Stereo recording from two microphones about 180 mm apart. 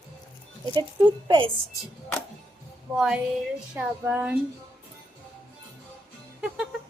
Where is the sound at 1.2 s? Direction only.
25° right (ahead or behind).